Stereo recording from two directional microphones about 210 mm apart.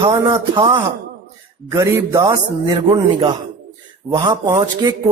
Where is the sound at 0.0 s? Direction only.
20° right (ahead or behind).